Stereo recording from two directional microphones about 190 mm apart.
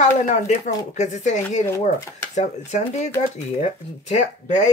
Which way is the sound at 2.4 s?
35° left (ahead or behind).